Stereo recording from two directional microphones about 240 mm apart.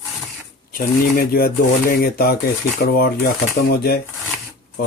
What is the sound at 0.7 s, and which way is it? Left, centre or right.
Speech, left.